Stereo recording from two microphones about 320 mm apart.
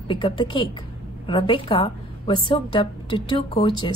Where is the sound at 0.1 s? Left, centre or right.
Centre.